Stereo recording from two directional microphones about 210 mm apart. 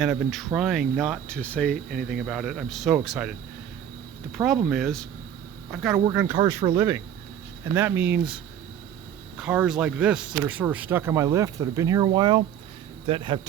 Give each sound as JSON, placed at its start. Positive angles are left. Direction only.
{"t": 0.0, "sound": "speech", "side_deg": -5}
{"t": 6.1, "sound": "speech", "side_deg": -10}
{"t": 9.4, "sound": "speech", "side_deg": -5}